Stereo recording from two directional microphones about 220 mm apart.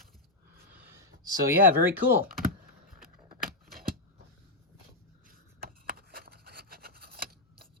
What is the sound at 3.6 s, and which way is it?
Scissors, 40° right (ahead or behind).